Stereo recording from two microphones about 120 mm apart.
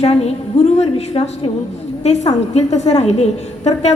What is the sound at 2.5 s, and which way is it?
A woman's voice, 65° left (ahead or behind).